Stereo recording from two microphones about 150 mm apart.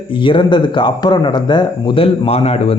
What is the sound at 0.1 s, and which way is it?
Speech, 35° left (ahead or behind).